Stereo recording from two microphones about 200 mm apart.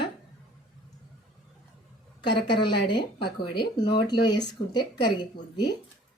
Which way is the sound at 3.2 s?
25° left (ahead or behind).